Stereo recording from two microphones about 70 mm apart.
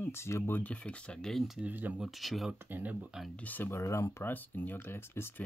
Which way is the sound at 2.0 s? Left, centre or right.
Centre.